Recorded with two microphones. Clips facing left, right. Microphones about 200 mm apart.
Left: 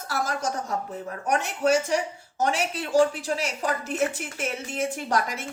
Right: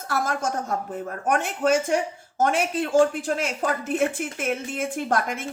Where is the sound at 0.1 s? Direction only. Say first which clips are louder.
Right 2 dB; 50° right (ahead or behind).